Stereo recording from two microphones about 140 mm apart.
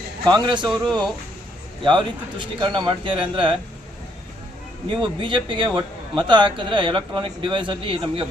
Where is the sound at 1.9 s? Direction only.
35° right (ahead or behind).